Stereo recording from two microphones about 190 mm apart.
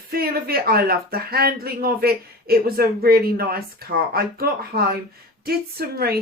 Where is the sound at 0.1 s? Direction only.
55° right (ahead or behind).